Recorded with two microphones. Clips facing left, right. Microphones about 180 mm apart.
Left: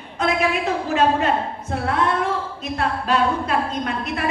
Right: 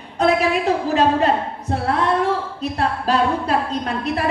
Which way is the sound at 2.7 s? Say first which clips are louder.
Right 1 dB; 35° right (ahead or behind).